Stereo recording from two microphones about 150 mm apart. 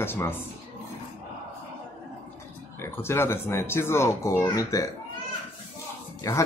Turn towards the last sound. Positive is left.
turn(degrees=20)  # may be behind; listen again after turning